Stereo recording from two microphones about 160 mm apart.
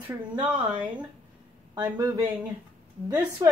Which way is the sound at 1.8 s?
25° right (ahead or behind).